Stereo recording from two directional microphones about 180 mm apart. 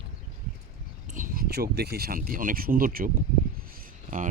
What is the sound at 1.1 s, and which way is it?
Speech, 50° right (ahead or behind).